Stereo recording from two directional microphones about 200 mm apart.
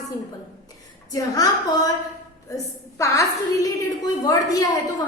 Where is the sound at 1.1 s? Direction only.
15° left (ahead or behind).